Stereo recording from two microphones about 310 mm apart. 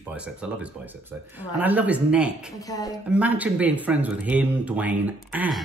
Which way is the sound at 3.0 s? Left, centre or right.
Centre.